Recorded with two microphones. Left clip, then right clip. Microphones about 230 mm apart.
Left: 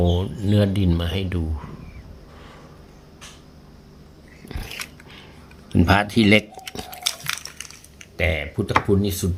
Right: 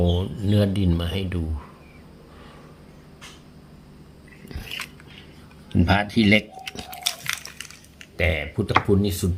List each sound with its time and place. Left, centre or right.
0.0 s speech: centre
4.4 s biting: centre
5.7 s speech: left
6.7 s a sound: centre